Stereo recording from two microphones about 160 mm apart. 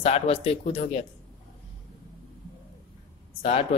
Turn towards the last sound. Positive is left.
turn(degrees=40)  # may be behind; listen again after turning